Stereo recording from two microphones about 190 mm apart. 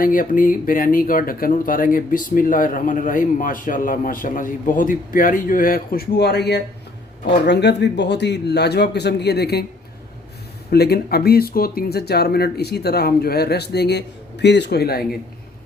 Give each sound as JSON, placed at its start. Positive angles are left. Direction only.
{"t": 0.0, "sound": "speech", "side_deg": 45}
{"t": 10.7, "sound": "speech", "side_deg": 55}